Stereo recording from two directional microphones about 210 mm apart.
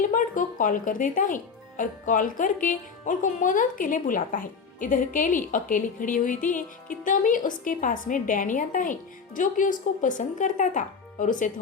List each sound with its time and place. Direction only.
0.0 s speech: 40° left (ahead or behind)